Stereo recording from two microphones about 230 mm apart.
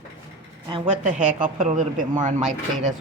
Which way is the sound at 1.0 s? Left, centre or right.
Right.